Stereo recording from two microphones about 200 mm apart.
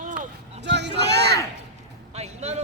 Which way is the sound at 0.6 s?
60° right (ahead or behind).